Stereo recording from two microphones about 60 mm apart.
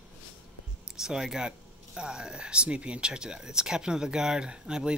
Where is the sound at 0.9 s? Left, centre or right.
Centre.